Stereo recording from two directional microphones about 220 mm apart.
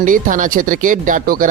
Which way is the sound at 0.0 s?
35° right (ahead or behind).